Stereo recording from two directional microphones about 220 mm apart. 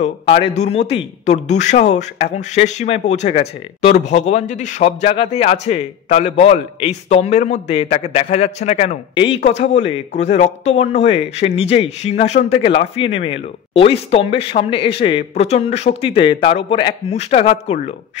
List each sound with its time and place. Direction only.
0.0 s a man's voice: 30° left (ahead or behind)